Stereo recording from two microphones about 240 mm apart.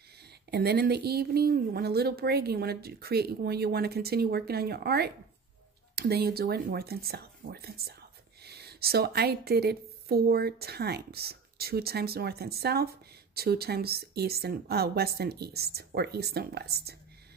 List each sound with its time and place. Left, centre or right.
0.5 s speech: right